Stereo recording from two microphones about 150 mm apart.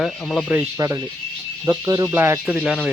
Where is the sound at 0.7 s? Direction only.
20° right (ahead or behind); by 2.9 s 5° right (ahead or behind).